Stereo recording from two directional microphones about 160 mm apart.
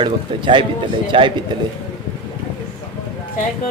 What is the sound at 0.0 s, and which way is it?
Speech, 30° right (ahead or behind).